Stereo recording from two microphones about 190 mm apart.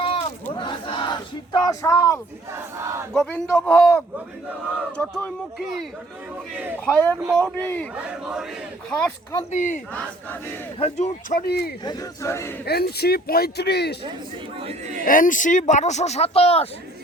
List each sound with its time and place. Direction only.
0.0 s crowd: 30° left (ahead or behind)
0.5 s battle cry: 25° left (ahead or behind)
2.5 s battle cry: 15° right (ahead or behind)
3.1 s a man's voice: 5° left (ahead or behind)
7.2 s battle cry: 15° right (ahead or behind)
7.4 s speech: 10° left (ahead or behind)
8.9 s a man's voice: 5° left (ahead or behind)
9.5 s speech: 45° left (ahead or behind)
9.9 s speech: 5° left (ahead or behind)
10.8 s speech: 35° left (ahead or behind); by 11.7 s 55° left (ahead or behind)
11.9 s speech: 15° left (ahead or behind)
12.6 s speech: 55° left (ahead or behind)
14.6 s speech: 35° right (ahead or behind)
15.0 s speech: 45° left (ahead or behind)